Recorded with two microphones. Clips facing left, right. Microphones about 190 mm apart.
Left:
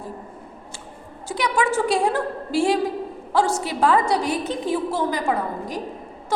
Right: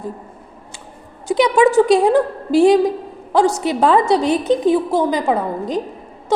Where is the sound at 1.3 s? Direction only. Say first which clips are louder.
Right 9 dB; 20° right (ahead or behind).